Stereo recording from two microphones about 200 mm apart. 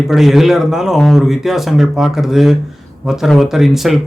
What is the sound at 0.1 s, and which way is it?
Speech, centre (ahead or behind).